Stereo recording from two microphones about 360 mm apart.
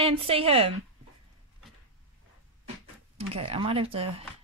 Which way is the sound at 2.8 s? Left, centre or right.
Centre.